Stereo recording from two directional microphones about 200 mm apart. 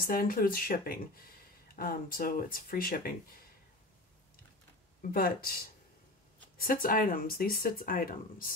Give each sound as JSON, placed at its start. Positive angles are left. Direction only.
{"t": 0.0, "sound": "speech", "side_deg": 45}
{"t": 5.1, "sound": "speech", "side_deg": 45}